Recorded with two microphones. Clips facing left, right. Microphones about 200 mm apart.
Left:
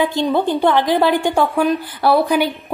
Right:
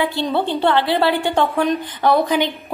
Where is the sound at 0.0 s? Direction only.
15° left (ahead or behind).